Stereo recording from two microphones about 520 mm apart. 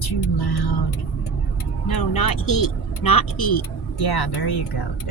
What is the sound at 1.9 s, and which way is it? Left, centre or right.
Speech, left.